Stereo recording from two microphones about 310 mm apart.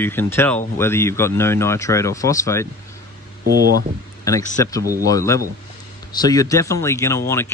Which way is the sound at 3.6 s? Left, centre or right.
Right.